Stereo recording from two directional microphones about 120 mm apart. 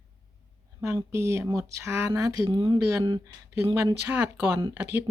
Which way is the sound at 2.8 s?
25° right (ahead or behind).